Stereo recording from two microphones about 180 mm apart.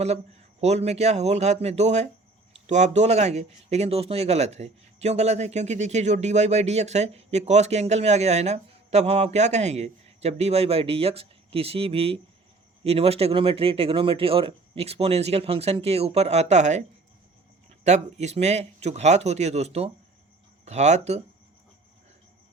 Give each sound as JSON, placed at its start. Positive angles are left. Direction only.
{"t": 0.6, "sound": "speech", "side_deg": -40}
{"t": 17.8, "sound": "speech", "side_deg": -40}